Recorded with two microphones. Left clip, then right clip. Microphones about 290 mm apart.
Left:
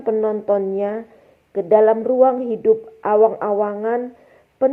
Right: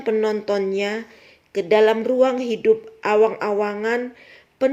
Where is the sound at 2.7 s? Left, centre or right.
Right.